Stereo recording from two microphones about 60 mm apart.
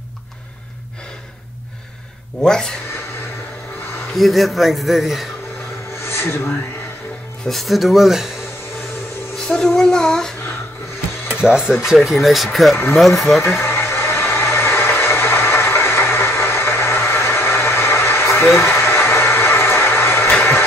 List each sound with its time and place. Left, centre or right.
2.4 s speech: centre
4.1 s a man's voice: centre
6.0 s music: left
7.4 s a man's voice: centre
9.5 s child singing: centre
11.4 s a man's voice: centre
13.7 s vehicle: left
18.7 s a sound: left